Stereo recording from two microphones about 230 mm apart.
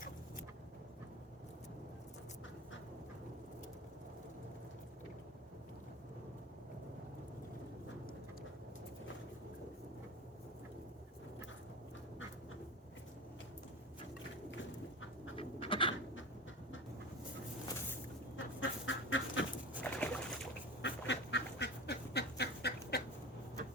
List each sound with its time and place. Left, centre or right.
15.4 s a sound: left
18.3 s duck: left
19.8 s boat: centre
20.8 s duck: left